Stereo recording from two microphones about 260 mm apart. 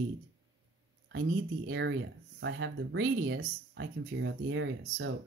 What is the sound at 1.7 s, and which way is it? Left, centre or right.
Speech, right.